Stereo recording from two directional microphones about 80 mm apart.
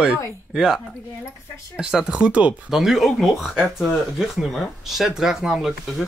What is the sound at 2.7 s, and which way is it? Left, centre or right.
Speech, centre.